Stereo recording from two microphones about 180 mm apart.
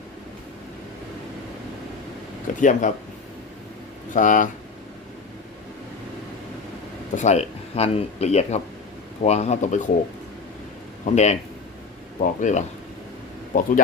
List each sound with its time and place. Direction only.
2.6 s speech: 45° left (ahead or behind)
4.1 s speech: 45° left (ahead or behind)
7.2 s speech: 40° left (ahead or behind)
11.0 s speech: 40° left (ahead or behind)